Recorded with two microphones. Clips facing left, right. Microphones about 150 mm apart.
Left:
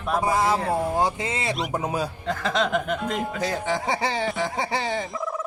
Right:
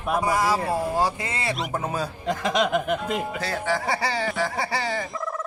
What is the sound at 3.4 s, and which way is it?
Speech, 20° left (ahead or behind).